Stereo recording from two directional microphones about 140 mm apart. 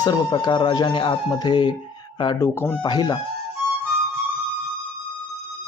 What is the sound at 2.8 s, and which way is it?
Speech, 30° left (ahead or behind).